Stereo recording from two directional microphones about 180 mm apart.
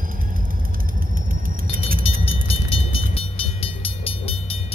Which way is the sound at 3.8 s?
30° left (ahead or behind).